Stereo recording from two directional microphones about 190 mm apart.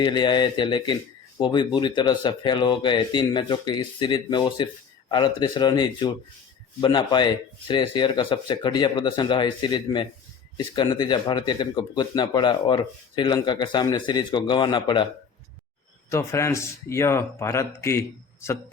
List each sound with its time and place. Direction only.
0.0 s speech: 25° left (ahead or behind)
16.0 s a man's voice: 15° left (ahead or behind)